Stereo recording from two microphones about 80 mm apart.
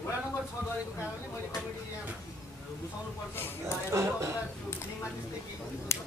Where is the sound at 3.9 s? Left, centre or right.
Right.